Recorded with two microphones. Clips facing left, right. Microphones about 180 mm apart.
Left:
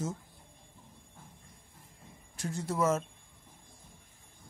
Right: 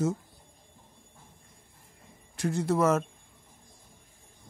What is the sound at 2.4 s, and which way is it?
Speech, 70° right (ahead or behind).